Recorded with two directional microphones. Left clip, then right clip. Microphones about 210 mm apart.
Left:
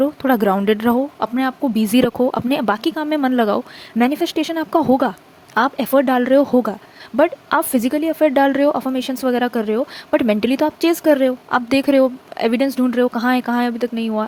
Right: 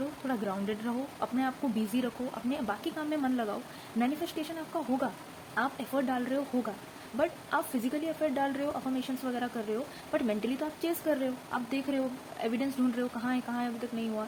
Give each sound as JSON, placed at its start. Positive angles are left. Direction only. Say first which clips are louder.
{"t": 0.3, "sound": "speech", "louder": "left 18 dB", "side_deg": 55}